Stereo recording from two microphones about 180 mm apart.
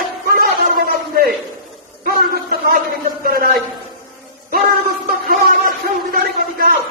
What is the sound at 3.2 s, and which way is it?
Speech, 55° right (ahead or behind).